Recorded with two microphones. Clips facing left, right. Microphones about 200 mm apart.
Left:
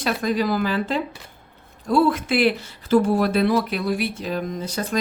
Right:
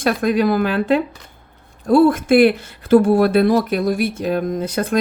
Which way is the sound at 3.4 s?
45° right (ahead or behind).